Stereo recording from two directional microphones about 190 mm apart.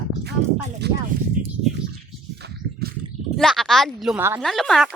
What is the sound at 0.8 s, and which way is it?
Speech, 60° right (ahead or behind).